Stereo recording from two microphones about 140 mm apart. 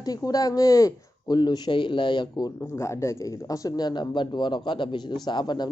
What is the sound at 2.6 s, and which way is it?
Speech, 20° left (ahead or behind).